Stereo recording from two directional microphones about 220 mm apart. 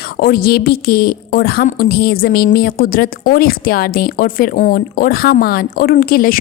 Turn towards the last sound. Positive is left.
turn(degrees=40)  # may be behind; listen again after turning